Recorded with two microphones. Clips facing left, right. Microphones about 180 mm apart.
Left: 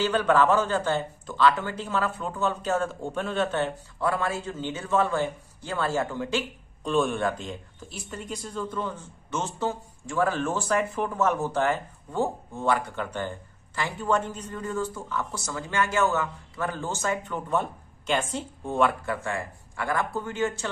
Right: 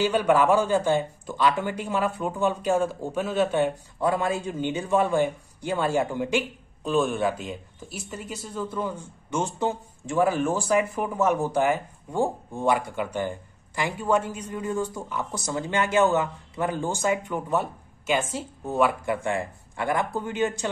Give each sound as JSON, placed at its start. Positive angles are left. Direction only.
{"t": 0.0, "sound": "speech", "side_deg": -10}
{"t": 6.8, "sound": "speech", "side_deg": 0}
{"t": 19.0, "sound": "speech", "side_deg": -20}